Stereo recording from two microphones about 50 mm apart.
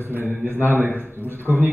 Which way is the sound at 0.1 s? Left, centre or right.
Right.